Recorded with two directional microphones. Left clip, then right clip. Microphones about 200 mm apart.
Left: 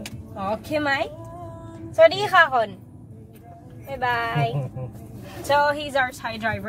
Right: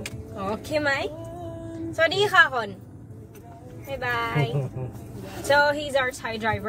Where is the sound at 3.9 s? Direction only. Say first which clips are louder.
Left 3 dB; 20° left (ahead or behind).